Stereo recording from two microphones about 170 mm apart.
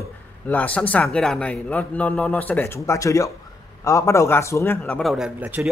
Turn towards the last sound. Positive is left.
turn(degrees=-10)  # may be behind; listen again after turning